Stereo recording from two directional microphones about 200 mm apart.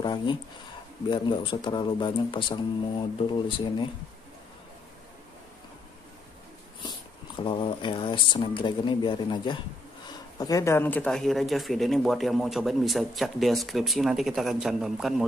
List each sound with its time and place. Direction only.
0.0 s speech: 25° left (ahead or behind)
6.8 s speech: 25° left (ahead or behind); by 15.2 s centre (ahead or behind)